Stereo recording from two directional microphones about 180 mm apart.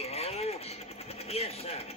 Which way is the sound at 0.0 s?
35° left (ahead or behind).